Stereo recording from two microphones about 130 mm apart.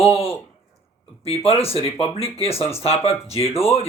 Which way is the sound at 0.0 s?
50° left (ahead or behind).